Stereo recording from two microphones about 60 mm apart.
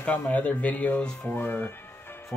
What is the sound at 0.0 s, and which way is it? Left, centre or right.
Speech, left.